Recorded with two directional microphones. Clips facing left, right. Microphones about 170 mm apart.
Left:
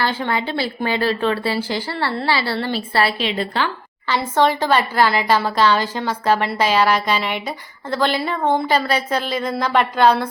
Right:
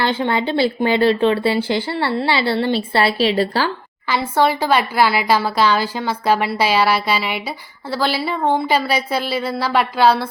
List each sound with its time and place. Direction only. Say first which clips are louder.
0.0 s speech: right 3 dB; 25° right (ahead or behind)
4.1 s a woman's voice: even; 10° right (ahead or behind)